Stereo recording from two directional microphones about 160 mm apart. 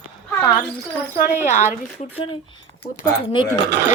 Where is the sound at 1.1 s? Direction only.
55° left (ahead or behind).